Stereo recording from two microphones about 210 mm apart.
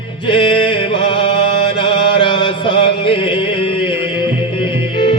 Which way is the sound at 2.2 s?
20° left (ahead or behind).